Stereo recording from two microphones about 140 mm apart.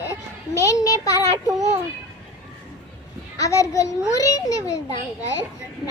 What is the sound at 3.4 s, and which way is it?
A child's voice, 25° left (ahead or behind).